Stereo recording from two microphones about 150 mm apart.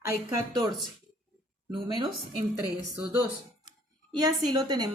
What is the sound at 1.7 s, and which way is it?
Speech, 30° right (ahead or behind).